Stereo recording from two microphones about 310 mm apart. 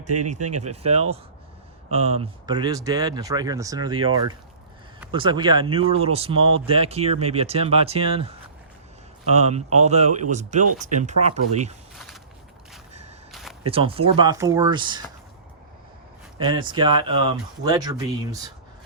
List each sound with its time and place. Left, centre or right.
0.1 s speech: right
0.8 s speech: centre
11.9 s a sound: centre
12.9 s whip: right
13.3 s a sound: centre
13.7 s speech: centre
16.4 s speech: centre